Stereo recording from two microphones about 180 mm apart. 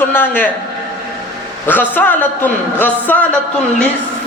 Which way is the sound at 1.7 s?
10° left (ahead or behind).